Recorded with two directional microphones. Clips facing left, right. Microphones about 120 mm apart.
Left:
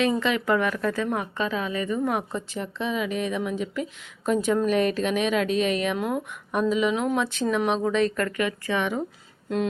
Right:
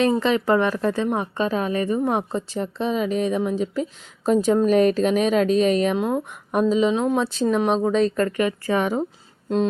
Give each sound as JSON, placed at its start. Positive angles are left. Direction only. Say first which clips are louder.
{"t": 0.0, "sound": "a woman's voice", "louder": "right 4 dB", "side_deg": -35}
{"t": 1.5, "sound": "a woman's voice", "louder": "right 5 dB", "side_deg": -45}
{"t": 6.0, "sound": "a woman's voice", "louder": "right 4 dB", "side_deg": -25}
{"t": 6.2, "sound": "a woman's voice", "louder": "right 4 dB", "side_deg": -40}